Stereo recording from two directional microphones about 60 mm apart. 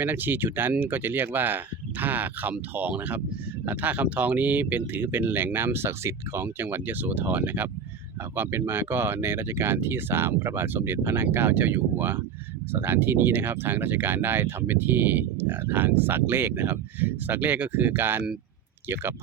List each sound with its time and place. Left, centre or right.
0.0 s speech: right
8.4 s speech: right